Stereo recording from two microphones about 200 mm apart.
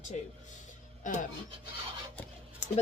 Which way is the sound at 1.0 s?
40° left (ahead or behind).